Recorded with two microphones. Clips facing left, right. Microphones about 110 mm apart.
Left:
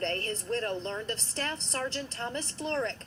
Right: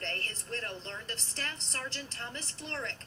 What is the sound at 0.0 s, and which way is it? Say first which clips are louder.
A woman's voice: left 8 dB; 30° left (ahead or behind).